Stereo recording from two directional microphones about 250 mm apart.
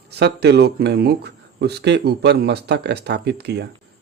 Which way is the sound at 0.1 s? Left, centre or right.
Right.